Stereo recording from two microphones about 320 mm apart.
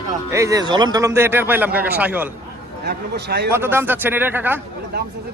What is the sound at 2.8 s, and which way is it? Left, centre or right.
Speech, right.